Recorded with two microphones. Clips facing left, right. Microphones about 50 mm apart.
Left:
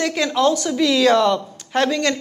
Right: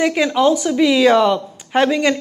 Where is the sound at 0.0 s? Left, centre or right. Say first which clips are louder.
Right 3 dB; centre.